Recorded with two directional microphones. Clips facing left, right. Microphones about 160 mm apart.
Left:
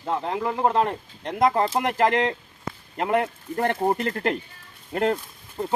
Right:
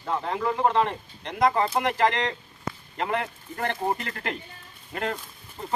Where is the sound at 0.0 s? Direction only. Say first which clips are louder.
Left 1 dB; 35° left (ahead or behind).